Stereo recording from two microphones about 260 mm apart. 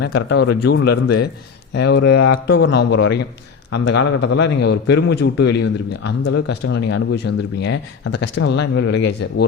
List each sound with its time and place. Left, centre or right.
0.0 s a man's voice: left